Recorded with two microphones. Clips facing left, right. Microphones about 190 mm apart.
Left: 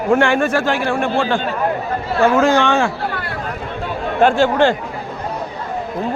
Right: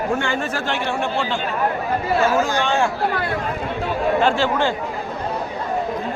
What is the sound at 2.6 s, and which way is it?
Speech, 75° left (ahead or behind).